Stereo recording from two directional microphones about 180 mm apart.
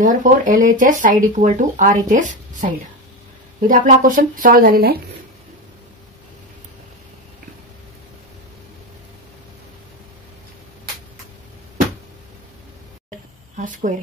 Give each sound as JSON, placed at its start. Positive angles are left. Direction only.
{"t": 0.0, "sound": "speech", "side_deg": -45}
{"t": 13.6, "sound": "speech", "side_deg": -45}